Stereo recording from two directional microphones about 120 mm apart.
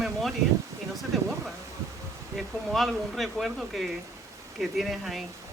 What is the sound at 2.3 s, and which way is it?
Speech, centre (ahead or behind).